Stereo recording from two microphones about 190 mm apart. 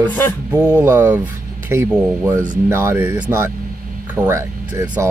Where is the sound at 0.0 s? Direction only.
10° left (ahead or behind).